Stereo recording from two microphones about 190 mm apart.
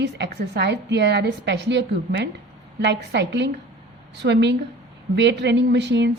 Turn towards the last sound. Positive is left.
turn(degrees=-65)  # may be behind; listen again after turning